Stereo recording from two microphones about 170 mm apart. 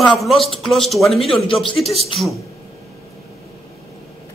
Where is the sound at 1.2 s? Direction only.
30° left (ahead or behind).